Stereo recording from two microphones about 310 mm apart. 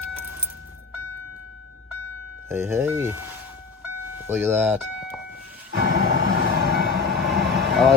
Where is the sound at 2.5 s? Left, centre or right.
Centre.